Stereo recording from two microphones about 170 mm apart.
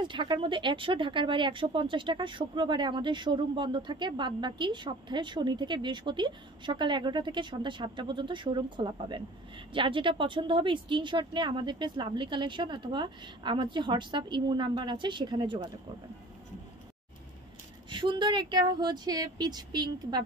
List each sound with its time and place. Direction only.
0.0 s speech: 30° right (ahead or behind)
17.8 s speech: 30° right (ahead or behind)